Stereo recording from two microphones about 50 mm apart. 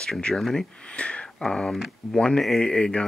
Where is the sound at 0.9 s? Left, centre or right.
Left.